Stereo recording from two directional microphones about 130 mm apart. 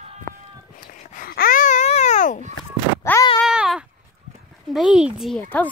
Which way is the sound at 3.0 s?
25° left (ahead or behind).